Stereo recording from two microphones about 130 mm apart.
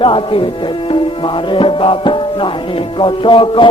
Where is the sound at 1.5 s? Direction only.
45° left (ahead or behind).